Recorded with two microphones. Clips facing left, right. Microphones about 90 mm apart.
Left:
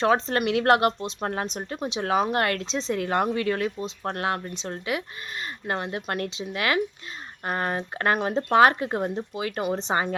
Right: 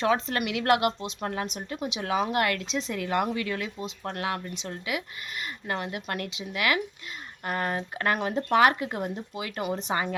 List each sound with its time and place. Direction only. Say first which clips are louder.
0.0 s speech: left 4 dB; 35° left (ahead or behind)